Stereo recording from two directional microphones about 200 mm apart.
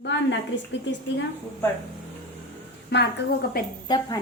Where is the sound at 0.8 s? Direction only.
65° left (ahead or behind).